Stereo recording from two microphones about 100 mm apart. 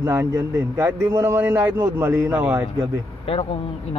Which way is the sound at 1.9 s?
30° right (ahead or behind).